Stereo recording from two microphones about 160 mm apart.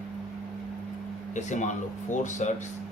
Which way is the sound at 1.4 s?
50° left (ahead or behind).